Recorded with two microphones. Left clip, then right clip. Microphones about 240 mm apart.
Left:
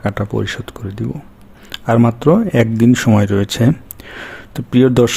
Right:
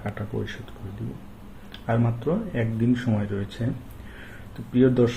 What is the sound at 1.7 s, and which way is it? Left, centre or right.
Speech, left.